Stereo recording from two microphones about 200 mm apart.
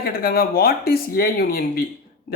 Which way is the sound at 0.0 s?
50° left (ahead or behind).